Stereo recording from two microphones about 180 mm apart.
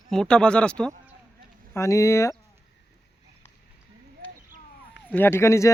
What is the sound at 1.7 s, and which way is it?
Speech, 15° left (ahead or behind).